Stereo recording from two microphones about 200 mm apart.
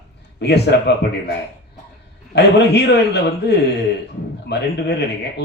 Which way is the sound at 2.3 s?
55° left (ahead or behind).